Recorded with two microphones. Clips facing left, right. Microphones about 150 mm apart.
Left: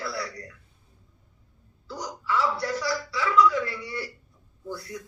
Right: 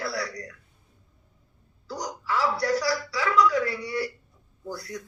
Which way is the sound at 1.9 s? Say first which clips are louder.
Even; 40° right (ahead or behind).